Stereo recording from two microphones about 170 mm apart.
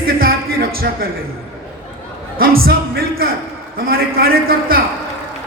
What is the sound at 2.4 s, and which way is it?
A man's voice, 60° right (ahead or behind).